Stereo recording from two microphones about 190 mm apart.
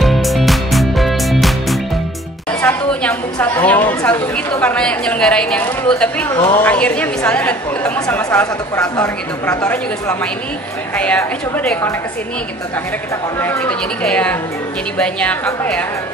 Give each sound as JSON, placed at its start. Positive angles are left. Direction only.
{"t": 0.0, "sound": "music", "side_deg": 0}
{"t": 2.6, "sound": "a woman's voice", "side_deg": 5}
{"t": 6.3, "sound": "a woman's voice", "side_deg": 20}
{"t": 6.6, "sound": "a woman's voice", "side_deg": 5}
{"t": 13.4, "sound": "a woman's voice", "side_deg": 10}